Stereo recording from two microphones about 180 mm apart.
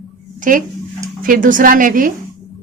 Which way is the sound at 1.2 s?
50° right (ahead or behind).